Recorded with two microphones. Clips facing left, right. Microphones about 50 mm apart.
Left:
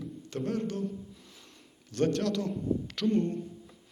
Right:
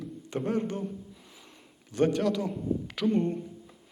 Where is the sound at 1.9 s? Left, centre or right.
Centre.